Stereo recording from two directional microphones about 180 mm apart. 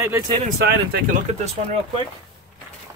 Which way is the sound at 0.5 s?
65° right (ahead or behind).